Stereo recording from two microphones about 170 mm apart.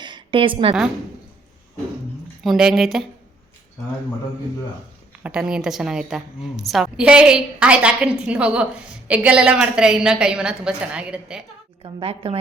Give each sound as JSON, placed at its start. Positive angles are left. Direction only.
{"t": 0.0, "sound": "a sound", "side_deg": -25}
{"t": 2.4, "sound": "a woman's voice", "side_deg": 0}
{"t": 5.2, "sound": "a woman's voice", "side_deg": -5}
{"t": 11.8, "sound": "a woman's voice", "side_deg": -30}